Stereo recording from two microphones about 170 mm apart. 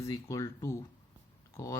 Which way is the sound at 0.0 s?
20° left (ahead or behind).